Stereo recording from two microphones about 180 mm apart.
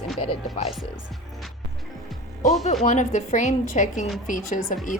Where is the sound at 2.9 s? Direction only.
40° left (ahead or behind).